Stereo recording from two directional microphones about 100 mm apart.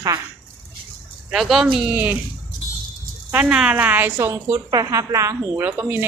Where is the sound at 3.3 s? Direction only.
15° right (ahead or behind).